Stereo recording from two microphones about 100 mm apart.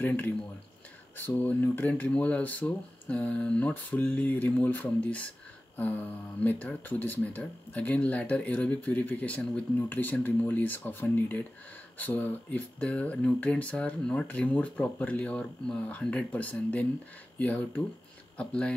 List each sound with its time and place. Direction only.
0.0 s speech: 15° left (ahead or behind)